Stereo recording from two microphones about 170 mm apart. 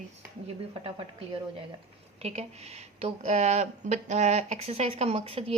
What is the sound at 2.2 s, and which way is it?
Speech, 40° right (ahead or behind).